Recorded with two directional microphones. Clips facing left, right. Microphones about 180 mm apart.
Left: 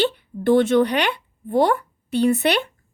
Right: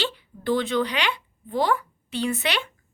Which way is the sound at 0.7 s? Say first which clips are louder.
Left 7 dB; 55° left (ahead or behind).